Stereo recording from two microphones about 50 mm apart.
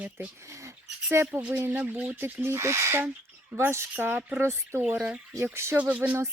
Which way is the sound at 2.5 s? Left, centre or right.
Right.